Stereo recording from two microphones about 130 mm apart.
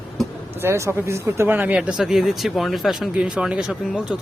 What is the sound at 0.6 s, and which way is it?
Speech, 20° right (ahead or behind).